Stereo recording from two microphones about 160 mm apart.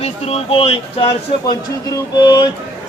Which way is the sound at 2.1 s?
25° left (ahead or behind).